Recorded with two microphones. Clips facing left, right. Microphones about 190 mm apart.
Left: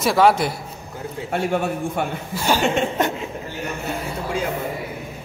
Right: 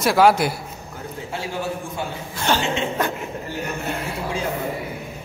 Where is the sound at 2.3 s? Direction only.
10° left (ahead or behind).